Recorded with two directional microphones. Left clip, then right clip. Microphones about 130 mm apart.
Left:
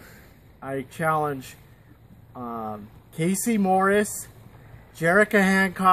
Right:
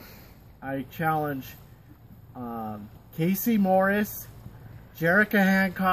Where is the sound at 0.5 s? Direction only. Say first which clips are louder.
Left 2 dB; 30° left (ahead or behind).